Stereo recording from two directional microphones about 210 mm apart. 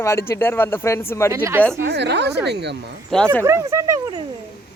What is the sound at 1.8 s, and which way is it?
Speech, 55° right (ahead or behind).